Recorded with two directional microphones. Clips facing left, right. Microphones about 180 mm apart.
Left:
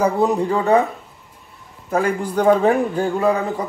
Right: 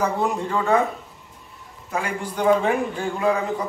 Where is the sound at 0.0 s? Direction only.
40° left (ahead or behind).